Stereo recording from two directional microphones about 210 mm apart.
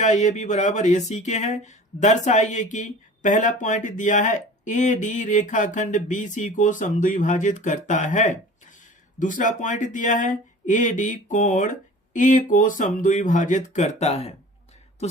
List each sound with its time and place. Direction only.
0.0 s speech: 35° left (ahead or behind)